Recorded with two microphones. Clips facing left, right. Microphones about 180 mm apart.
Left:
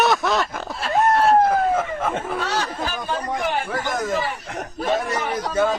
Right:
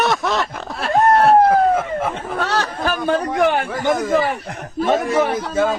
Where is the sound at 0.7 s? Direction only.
60° right (ahead or behind).